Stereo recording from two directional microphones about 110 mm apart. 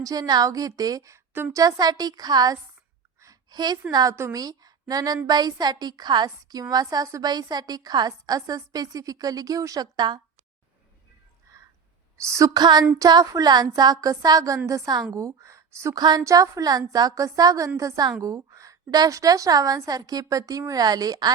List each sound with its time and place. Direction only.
0.0 s a woman's voice: 35° right (ahead or behind); by 1.5 s 20° right (ahead or behind)
1.5 s a woman's voice: 35° right (ahead or behind)
3.2 s a sound: 35° right (ahead or behind)
4.1 s a woman's voice: 30° right (ahead or behind)
11.5 s a sound: 30° right (ahead or behind)
12.1 s a woman's voice: 30° right (ahead or behind)
16.0 s a woman's voice: 35° right (ahead or behind)